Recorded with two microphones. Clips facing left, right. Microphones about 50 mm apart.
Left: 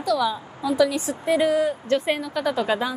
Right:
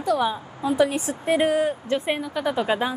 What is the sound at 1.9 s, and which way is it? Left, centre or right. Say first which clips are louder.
Speech: left 2 dB; centre.